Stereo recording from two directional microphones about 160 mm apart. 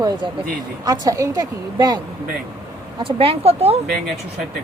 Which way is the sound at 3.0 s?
35° right (ahead or behind).